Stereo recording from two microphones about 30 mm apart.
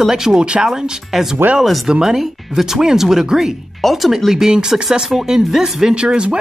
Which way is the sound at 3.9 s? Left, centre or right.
Centre.